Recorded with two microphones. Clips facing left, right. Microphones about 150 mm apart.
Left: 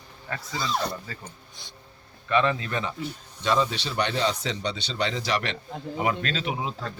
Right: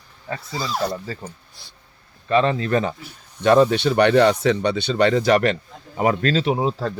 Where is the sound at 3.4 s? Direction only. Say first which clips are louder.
Right 10 dB; 60° right (ahead or behind).